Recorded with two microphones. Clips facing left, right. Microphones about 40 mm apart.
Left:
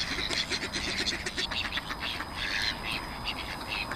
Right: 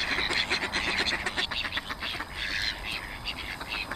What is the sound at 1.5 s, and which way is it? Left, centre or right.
Duck, centre.